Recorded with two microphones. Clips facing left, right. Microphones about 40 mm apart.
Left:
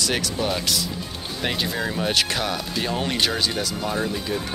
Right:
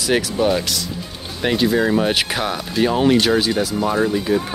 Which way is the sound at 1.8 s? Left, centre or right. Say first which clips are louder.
Right 6 dB; centre.